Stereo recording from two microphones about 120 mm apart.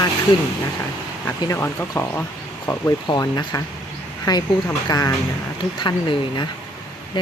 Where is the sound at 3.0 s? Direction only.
35° left (ahead or behind).